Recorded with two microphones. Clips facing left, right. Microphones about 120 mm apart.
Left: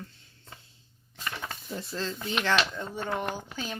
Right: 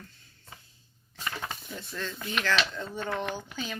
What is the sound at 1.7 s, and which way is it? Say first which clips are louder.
Speech: left 3 dB; 30° left (ahead or behind).